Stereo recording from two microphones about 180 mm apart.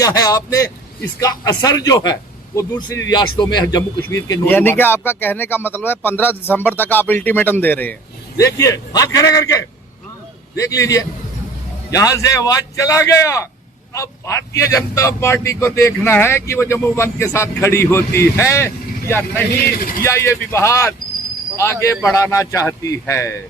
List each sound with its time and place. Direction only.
0.0 s a man's voice: 20° left (ahead or behind)
4.4 s a man's voice: 10° left (ahead or behind)
10.6 s a man's voice: 20° left (ahead or behind)